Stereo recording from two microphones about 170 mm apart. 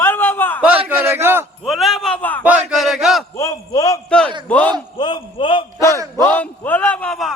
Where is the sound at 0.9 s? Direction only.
15° right (ahead or behind).